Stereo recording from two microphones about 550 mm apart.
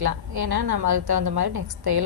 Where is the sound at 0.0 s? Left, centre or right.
Right.